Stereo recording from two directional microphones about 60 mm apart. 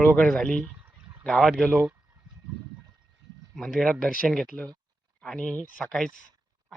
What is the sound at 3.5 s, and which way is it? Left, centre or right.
Speech, centre.